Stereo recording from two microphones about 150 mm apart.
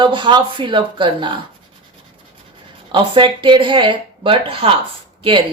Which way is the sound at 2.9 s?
35° right (ahead or behind).